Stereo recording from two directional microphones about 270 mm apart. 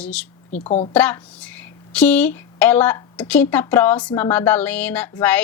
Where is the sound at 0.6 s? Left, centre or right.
Left.